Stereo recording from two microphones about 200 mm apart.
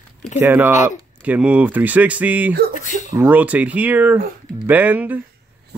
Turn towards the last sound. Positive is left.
turn(degrees=-10)  # may be behind; listen again after turning